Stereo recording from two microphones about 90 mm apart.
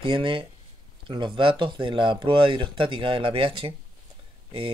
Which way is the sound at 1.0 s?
65° right (ahead or behind).